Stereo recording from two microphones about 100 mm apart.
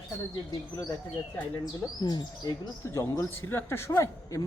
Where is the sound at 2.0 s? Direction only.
45° left (ahead or behind).